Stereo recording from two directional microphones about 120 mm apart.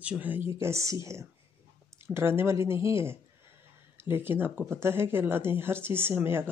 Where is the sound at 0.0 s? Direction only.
10° right (ahead or behind).